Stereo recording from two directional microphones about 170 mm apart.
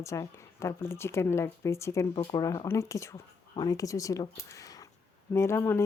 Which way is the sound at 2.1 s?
30° left (ahead or behind).